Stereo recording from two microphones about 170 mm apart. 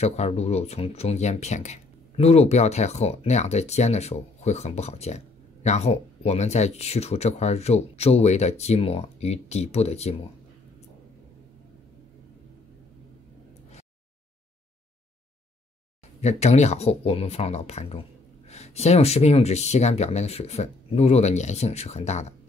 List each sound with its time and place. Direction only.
0.0 s speech: 40° left (ahead or behind)
16.2 s speech: 40° left (ahead or behind)